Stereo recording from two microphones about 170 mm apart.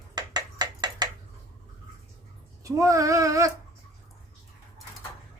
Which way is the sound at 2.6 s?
20° right (ahead or behind).